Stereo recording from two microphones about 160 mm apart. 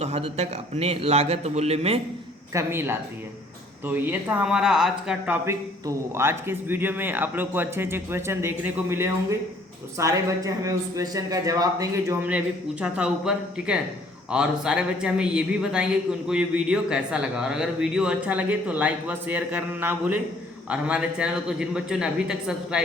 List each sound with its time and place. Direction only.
0.0 s a man's voice: 40° right (ahead or behind)
2.5 s a man's voice: 15° right (ahead or behind)
12.8 s speech: 5° right (ahead or behind)